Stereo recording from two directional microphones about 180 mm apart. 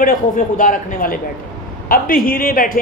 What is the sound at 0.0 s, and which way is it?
A man's voice, 50° left (ahead or behind).